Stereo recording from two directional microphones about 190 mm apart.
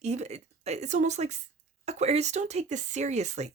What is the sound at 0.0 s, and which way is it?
A woman's voice, 35° right (ahead or behind).